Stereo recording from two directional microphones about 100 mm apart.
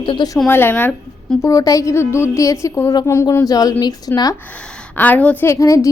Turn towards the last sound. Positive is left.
turn(degrees=30)  # may be behind; listen again after turning